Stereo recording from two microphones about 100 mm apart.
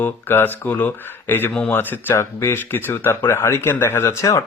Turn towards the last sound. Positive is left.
turn(degrees=30)  # may be behind; listen again after turning